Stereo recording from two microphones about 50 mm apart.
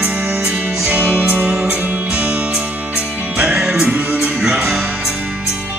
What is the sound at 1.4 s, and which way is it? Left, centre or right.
Music, right.